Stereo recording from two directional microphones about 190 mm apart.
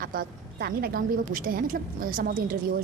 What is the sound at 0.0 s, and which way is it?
A woman's voice, 50° right (ahead or behind).